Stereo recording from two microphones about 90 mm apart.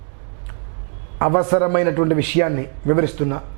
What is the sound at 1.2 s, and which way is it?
Speech, 15° right (ahead or behind).